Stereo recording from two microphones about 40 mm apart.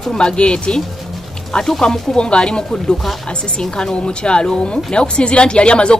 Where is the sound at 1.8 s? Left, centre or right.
Centre.